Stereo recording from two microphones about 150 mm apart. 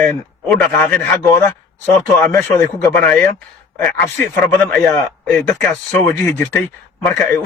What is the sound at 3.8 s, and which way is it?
A man's voice, 10° left (ahead or behind).